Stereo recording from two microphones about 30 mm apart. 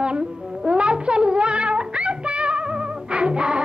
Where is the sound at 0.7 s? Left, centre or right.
Right.